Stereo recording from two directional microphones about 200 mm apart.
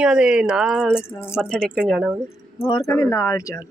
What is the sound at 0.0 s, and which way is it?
Speech, 5° right (ahead or behind).